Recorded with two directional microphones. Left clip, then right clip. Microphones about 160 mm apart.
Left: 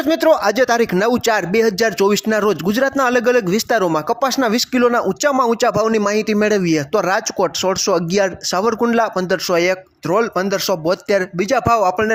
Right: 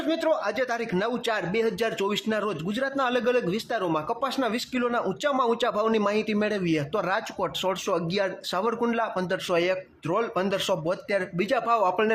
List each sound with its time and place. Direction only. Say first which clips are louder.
0.1 s a man's voice: left 12 dB; 45° left (ahead or behind)
3.7 s a man's voice: left 11 dB; 50° left (ahead or behind); by 12.1 s 30° left (ahead or behind)